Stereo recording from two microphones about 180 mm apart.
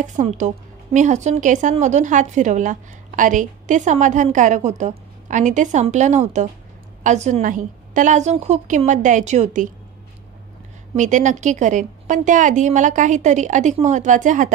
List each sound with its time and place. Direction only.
0.0 s a woman's voice: 45° right (ahead or behind)
11.0 s a woman's voice: 45° right (ahead or behind)